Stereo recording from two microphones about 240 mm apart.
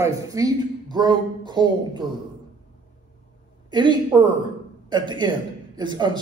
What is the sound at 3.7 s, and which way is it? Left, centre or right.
A man's voice, centre.